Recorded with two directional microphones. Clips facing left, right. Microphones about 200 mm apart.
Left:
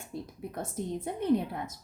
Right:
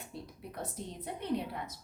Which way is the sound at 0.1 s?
50° left (ahead or behind).